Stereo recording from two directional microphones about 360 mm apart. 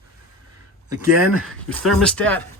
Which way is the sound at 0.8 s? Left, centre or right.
Right.